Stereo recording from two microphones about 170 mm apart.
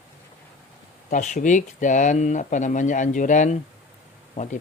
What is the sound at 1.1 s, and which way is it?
Speech, 50° left (ahead or behind).